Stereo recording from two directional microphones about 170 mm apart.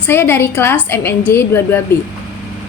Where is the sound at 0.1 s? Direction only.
15° left (ahead or behind).